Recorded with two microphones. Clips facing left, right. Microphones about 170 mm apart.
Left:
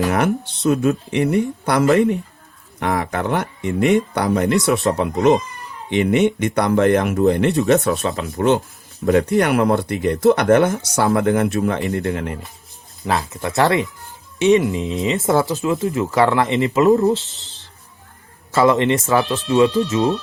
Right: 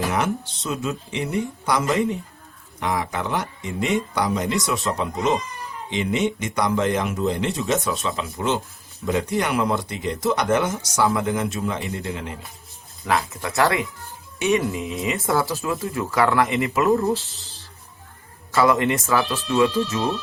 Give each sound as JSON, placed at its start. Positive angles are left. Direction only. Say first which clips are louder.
{"t": 0.1, "sound": "speech", "louder": "left 5 dB", "side_deg": 60}
{"t": 13.1, "sound": "speech", "louder": "left 2 dB", "side_deg": 30}